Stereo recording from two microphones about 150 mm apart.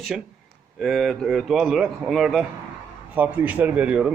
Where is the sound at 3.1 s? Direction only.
10° right (ahead or behind).